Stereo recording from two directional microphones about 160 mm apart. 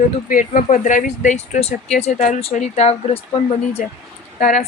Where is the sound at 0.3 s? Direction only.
55° left (ahead or behind).